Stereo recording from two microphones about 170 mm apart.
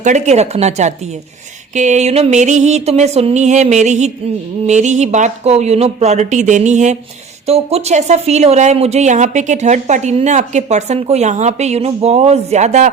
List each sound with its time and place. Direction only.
0.0 s speech: 45° right (ahead or behind)
1.7 s music: 45° right (ahead or behind)
7.4 s speech: 40° right (ahead or behind)